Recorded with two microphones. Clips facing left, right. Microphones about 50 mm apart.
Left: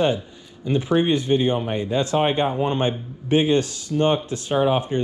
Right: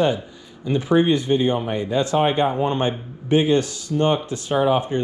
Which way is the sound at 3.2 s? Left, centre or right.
Left.